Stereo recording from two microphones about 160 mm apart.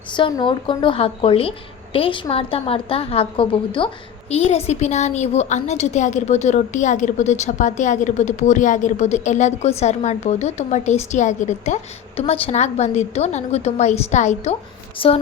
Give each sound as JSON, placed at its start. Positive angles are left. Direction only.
{"t": 0.1, "sound": "a woman's voice", "side_deg": 30}
{"t": 14.9, "sound": "speech", "side_deg": 35}